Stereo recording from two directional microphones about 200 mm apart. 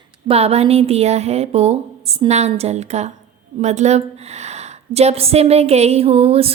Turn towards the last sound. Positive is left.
turn(degrees=-30)  # may be behind; listen again after turning